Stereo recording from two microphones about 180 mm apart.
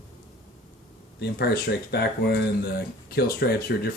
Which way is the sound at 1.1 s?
65° left (ahead or behind).